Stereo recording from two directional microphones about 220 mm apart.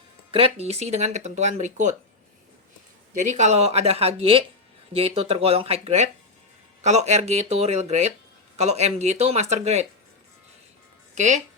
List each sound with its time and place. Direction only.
0.3 s speech: 25° right (ahead or behind)
3.2 s speech: 35° right (ahead or behind)
11.1 s speech: 35° right (ahead or behind)